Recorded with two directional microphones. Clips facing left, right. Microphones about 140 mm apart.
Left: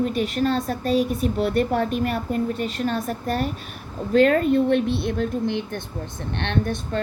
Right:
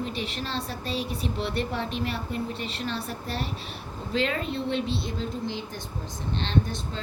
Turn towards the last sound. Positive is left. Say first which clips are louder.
# left 4 dB
turn(degrees=60)  # may be behind; listen again after turning